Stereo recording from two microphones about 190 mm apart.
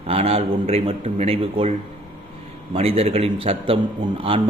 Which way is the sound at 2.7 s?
30° right (ahead or behind).